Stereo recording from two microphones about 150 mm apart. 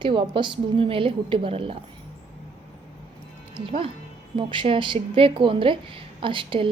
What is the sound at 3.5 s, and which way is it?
A woman's voice, 35° right (ahead or behind).